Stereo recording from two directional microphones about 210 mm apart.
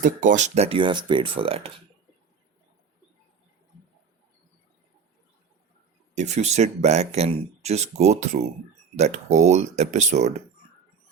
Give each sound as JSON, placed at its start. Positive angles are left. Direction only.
{"t": 0.0, "sound": "speech", "side_deg": -40}
{"t": 6.1, "sound": "speech", "side_deg": -30}